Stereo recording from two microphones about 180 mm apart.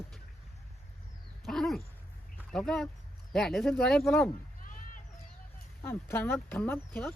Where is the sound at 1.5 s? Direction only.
Centre (ahead or behind).